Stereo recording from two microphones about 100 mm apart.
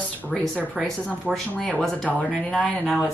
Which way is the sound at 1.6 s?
5° left (ahead or behind).